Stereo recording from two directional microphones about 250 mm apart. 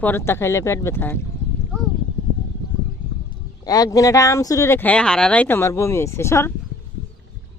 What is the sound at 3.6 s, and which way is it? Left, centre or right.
Speech, centre.